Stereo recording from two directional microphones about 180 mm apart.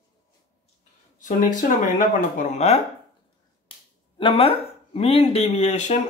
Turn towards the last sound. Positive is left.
turn(degrees=40)  # may be behind; listen again after turning